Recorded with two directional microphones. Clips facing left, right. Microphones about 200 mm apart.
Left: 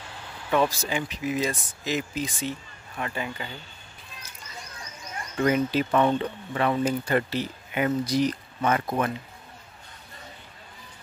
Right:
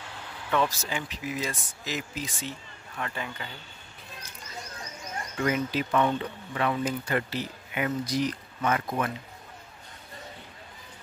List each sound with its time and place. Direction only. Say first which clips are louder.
0.5 s speech: left 3 dB; 15° left (ahead or behind)
5.4 s speech: left 5 dB; 35° left (ahead or behind)